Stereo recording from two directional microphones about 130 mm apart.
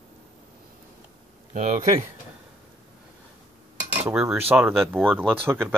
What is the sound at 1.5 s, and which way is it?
Speech, 65° right (ahead or behind).